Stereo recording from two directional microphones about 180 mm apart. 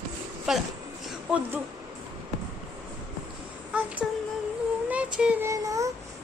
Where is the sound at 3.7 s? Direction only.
10° right (ahead or behind).